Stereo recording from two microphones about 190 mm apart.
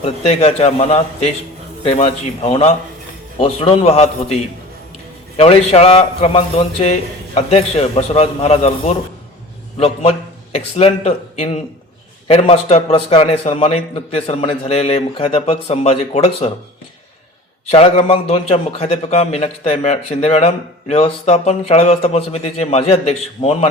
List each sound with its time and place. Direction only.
0.0 s a man's voice: 35° left (ahead or behind)
5.4 s a man's voice: 30° left (ahead or behind)
17.7 s a man's voice: 30° left (ahead or behind)